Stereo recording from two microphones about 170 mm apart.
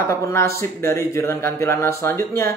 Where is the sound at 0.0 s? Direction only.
15° left (ahead or behind).